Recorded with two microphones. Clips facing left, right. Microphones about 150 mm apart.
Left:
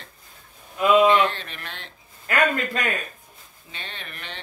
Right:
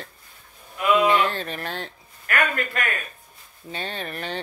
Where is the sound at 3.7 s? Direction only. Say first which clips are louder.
Right 8 dB; 40° right (ahead or behind).